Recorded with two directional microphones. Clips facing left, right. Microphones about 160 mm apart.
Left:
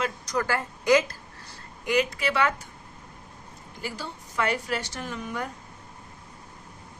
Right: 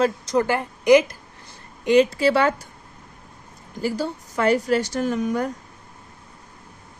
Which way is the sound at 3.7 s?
40° right (ahead or behind).